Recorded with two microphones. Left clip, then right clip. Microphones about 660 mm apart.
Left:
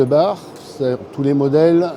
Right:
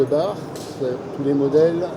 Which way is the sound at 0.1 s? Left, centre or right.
Left.